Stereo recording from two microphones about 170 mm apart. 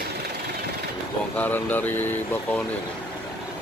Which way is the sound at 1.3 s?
10° left (ahead or behind).